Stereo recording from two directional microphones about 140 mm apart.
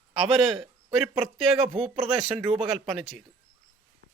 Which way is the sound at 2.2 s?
40° right (ahead or behind).